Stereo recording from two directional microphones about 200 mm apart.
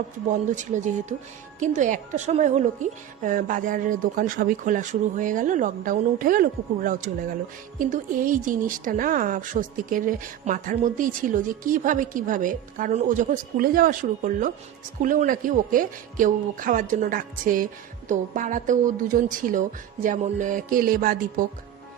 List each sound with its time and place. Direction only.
0.3 s a woman's voice: 40° right (ahead or behind)